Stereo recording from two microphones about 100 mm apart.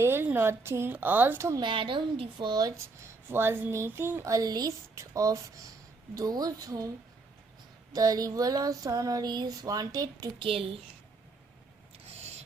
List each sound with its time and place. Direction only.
0.0 s speech: 25° right (ahead or behind)
1.6 s a woman's voice: 55° right (ahead or behind)
3.2 s speech: 25° right (ahead or behind)
6.1 s a sound: 40° right (ahead or behind)
7.9 s a sound: 40° right (ahead or behind)
10.3 s a woman's voice: 65° right (ahead or behind)